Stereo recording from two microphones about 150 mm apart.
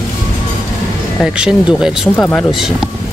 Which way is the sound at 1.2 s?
5° right (ahead or behind).